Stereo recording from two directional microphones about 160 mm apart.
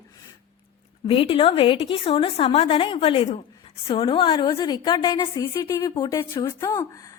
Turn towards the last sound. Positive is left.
turn(degrees=20)  # may be behind; listen again after turning